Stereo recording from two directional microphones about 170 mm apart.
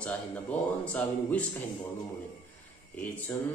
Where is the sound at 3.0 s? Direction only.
10° left (ahead or behind).